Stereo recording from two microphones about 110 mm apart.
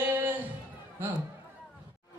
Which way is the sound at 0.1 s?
20° right (ahead or behind).